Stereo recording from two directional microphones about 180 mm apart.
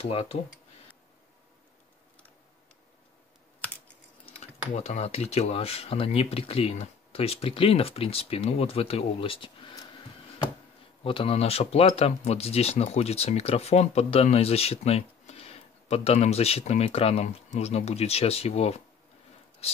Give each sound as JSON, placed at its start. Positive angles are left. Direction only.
{"t": 0.0, "sound": "speech", "side_deg": 30}
{"t": 4.3, "sound": "speech", "side_deg": 35}
{"t": 11.1, "sound": "speech", "side_deg": 30}